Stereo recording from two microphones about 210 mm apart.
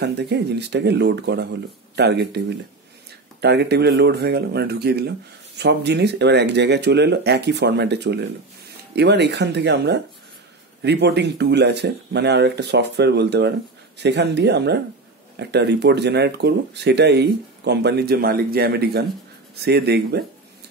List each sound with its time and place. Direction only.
0.0 s speech: 55° right (ahead or behind)